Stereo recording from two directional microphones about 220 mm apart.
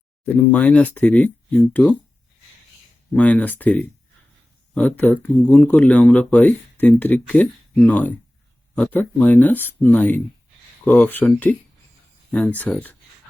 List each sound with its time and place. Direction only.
0.3 s speech: 5° left (ahead or behind)
3.1 s speech: 5° left (ahead or behind)